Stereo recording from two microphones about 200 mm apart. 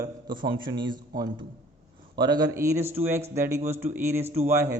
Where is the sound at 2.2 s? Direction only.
20° right (ahead or behind).